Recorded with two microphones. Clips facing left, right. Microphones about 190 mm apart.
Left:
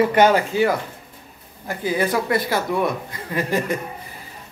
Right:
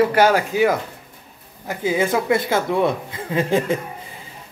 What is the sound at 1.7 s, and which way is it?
Speech, 20° right (ahead or behind).